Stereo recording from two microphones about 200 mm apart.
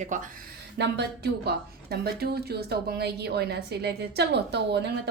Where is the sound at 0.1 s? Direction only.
40° right (ahead or behind).